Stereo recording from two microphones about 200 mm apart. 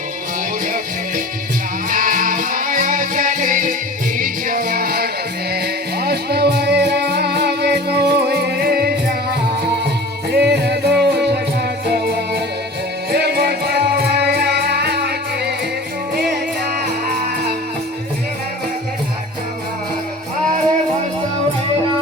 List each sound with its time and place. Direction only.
1.9 s music: 40° right (ahead or behind)
16.8 s music: 55° right (ahead or behind)